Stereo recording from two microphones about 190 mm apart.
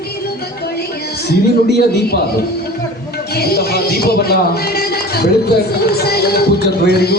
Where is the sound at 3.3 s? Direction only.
55° left (ahead or behind).